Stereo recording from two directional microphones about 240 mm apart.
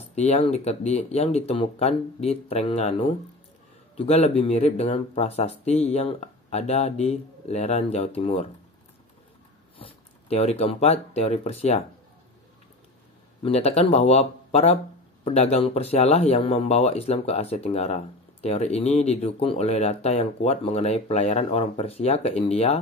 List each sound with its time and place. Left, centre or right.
0.1 s speech: left
9.8 s speech: left
13.4 s speech: left